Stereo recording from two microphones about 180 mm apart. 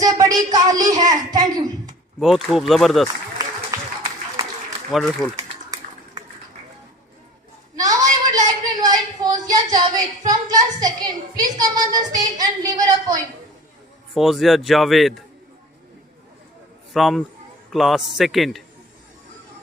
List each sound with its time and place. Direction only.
0.0 s speech: 20° right (ahead or behind)
2.1 s a man's voice: centre (ahead or behind)
4.9 s a man's voice: centre (ahead or behind)
7.8 s a sound: 20° right (ahead or behind)
14.1 s a man's voice: centre (ahead or behind)
16.9 s a man's voice: centre (ahead or behind)